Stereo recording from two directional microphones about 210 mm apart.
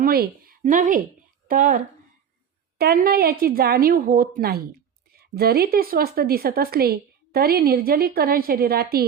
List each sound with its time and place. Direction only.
0.0 s a woman's voice: 45° right (ahead or behind)